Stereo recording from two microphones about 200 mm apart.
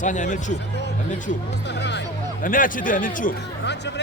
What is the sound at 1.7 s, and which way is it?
Speech, 60° left (ahead or behind).